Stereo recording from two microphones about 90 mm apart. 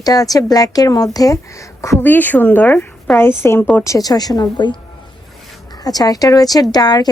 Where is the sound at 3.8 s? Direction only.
40° left (ahead or behind); by 4.7 s 55° left (ahead or behind).